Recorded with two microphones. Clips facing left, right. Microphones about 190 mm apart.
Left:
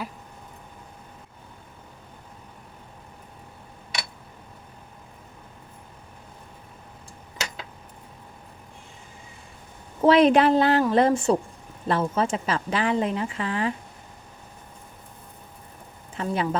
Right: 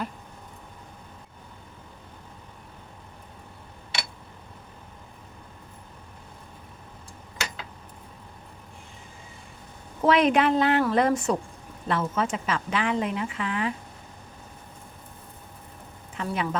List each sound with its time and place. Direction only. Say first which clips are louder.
10.0 s a woman's voice: left 4 dB; 30° left (ahead or behind)
16.1 s a woman's voice: left 3 dB; 30° left (ahead or behind)